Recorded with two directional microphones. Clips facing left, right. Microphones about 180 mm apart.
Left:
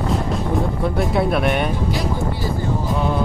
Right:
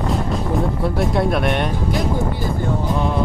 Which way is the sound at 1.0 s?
Centre (ahead or behind).